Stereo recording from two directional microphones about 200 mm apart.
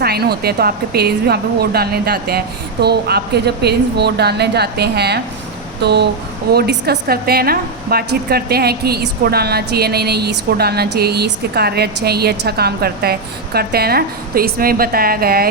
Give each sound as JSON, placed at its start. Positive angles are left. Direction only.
{"t": 0.0, "sound": "a woman's voice", "side_deg": -50}